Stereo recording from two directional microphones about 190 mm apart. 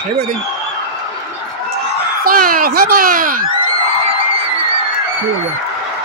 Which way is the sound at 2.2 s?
50° right (ahead or behind).